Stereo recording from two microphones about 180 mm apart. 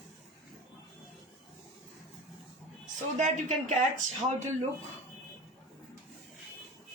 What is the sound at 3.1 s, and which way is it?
Speech, 40° right (ahead or behind).